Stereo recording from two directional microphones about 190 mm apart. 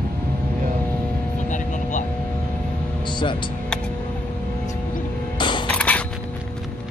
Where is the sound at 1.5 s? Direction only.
40° left (ahead or behind).